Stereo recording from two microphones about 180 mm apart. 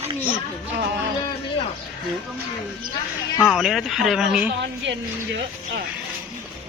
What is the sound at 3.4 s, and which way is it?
A man's voice, centre (ahead or behind).